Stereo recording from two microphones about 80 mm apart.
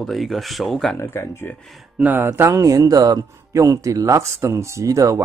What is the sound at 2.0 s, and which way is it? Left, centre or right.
Speech, right.